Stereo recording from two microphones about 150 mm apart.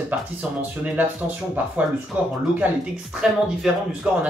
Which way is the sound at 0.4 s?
10° right (ahead or behind).